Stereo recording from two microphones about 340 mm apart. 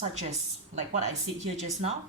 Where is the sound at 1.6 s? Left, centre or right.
Centre.